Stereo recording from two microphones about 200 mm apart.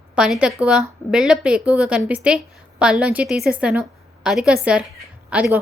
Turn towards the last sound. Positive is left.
turn(degrees=-5)  # may be behind; listen again after turning